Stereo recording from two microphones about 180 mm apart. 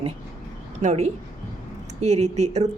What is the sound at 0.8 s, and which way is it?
A woman's voice, 40° right (ahead or behind).